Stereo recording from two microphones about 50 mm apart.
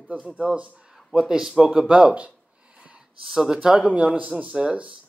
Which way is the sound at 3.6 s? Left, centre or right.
Centre.